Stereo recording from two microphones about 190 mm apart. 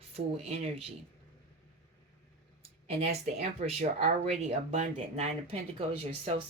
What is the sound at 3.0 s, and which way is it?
Speech, 35° right (ahead or behind).